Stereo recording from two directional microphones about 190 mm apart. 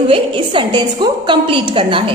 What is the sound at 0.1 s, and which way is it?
A woman's voice, 25° right (ahead or behind).